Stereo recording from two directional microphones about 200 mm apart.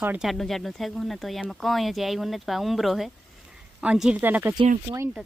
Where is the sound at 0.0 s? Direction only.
5° right (ahead or behind).